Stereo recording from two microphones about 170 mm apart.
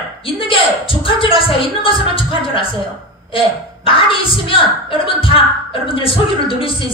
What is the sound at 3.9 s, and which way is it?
A woman's voice, 30° left (ahead or behind).